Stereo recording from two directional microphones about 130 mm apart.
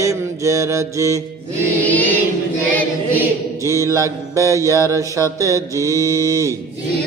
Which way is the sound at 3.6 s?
25° right (ahead or behind).